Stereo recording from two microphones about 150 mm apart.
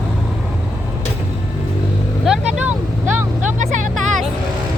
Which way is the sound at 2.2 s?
5° right (ahead or behind).